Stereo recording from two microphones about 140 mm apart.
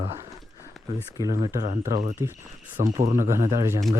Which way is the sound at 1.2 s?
25° right (ahead or behind).